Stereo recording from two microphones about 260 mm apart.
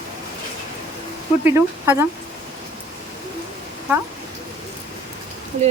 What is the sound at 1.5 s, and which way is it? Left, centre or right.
Speech, centre.